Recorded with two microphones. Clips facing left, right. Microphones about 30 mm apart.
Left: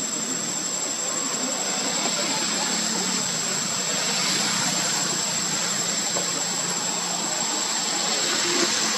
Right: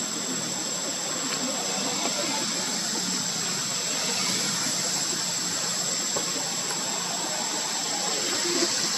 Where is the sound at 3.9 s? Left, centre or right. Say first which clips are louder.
Left 4 dB; left.